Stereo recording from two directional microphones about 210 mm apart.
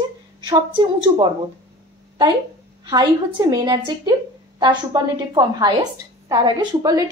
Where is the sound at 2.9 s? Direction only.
20° right (ahead or behind).